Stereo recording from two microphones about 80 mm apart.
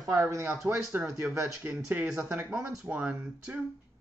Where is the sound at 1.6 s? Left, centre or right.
Right.